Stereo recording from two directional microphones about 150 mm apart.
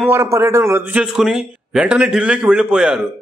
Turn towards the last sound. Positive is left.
turn(degrees=-5)  # may be behind; listen again after turning